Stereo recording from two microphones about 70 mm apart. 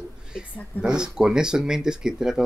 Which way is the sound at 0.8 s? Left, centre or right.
Centre.